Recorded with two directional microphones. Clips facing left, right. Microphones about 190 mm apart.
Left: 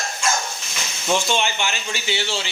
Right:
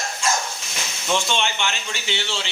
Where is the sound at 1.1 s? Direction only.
5° left (ahead or behind).